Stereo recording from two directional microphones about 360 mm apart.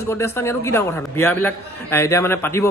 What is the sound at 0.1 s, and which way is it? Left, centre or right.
A man's voice, centre.